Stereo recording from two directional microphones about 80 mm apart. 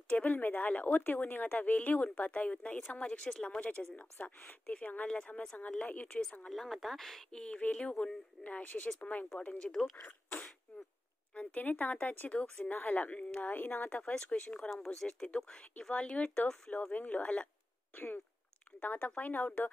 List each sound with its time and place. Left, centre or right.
0.1 s speech: left
6.5 s speech: centre
9.7 s speech: centre
9.9 s speech: left
10.7 s speech: centre
16.9 s speech: left